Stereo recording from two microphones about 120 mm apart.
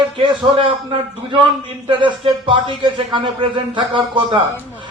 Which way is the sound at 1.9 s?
45° right (ahead or behind).